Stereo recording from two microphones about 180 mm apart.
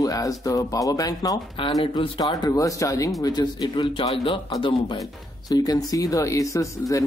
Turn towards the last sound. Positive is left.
turn(degrees=15)  # may be behind; listen again after turning